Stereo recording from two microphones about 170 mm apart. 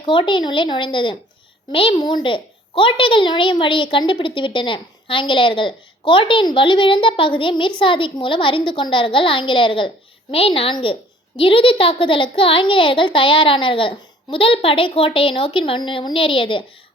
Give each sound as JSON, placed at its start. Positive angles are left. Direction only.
{"t": 0.0, "sound": "a child's voice", "side_deg": 30}